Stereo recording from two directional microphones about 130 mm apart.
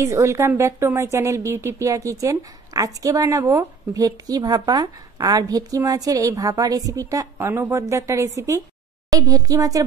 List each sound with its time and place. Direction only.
0.0 s a woman's voice: 25° right (ahead or behind)